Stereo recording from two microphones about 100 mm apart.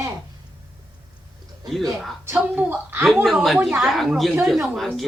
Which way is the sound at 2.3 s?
20° right (ahead or behind).